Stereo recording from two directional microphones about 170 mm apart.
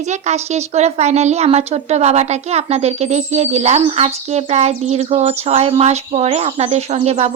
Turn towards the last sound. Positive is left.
turn(degrees=-35)  # may be behind; listen again after turning